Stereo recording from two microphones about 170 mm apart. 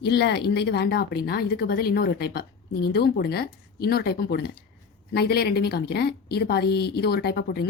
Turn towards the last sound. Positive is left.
turn(degrees=70)  # may be behind; listen again after turning